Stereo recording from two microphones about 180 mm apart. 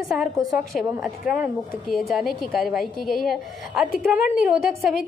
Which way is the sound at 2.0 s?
Centre (ahead or behind).